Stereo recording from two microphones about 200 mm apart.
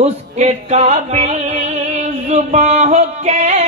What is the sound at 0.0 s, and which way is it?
Music, 30° right (ahead or behind).